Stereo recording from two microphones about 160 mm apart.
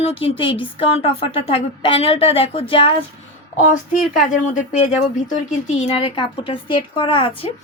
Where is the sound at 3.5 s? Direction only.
55° left (ahead or behind).